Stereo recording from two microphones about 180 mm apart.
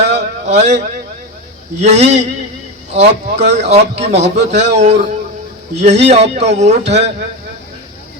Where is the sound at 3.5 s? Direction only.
35° right (ahead or behind).